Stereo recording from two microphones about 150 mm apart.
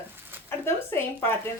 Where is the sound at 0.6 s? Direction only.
15° left (ahead or behind).